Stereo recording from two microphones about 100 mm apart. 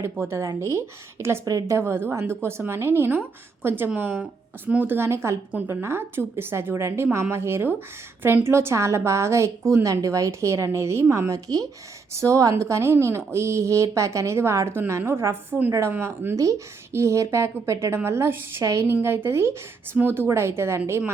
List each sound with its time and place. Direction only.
0.0 s a woman's voice: 25° right (ahead or behind)